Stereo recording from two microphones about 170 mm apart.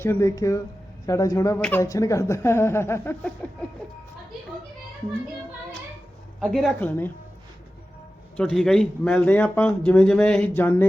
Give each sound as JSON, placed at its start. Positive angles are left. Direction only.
{"t": 0.0, "sound": "speech", "side_deg": 15}
{"t": 6.4, "sound": "speech", "side_deg": 0}
{"t": 8.4, "sound": "speech", "side_deg": 5}